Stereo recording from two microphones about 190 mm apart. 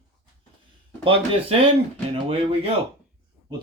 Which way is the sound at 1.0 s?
30° right (ahead or behind).